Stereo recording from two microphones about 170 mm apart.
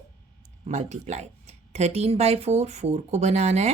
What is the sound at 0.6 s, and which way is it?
Speech, 40° right (ahead or behind).